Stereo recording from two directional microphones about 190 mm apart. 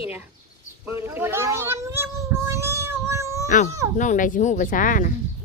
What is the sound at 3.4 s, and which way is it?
Speech, 40° left (ahead or behind).